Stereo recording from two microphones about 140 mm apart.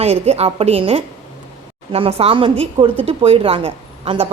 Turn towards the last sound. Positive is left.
turn(degrees=-40)  # may be behind; listen again after turning